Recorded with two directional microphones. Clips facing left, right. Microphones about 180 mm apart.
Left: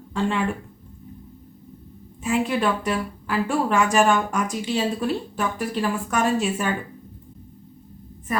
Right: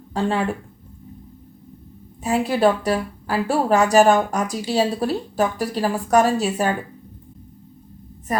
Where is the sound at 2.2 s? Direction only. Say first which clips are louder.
Right 4 dB; 35° right (ahead or behind).